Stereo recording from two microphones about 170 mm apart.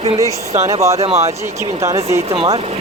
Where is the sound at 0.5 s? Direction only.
40° right (ahead or behind).